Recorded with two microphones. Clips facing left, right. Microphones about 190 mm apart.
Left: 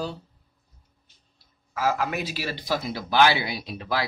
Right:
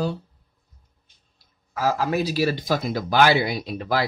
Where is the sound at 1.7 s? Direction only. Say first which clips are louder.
Right 3 dB; 35° right (ahead or behind).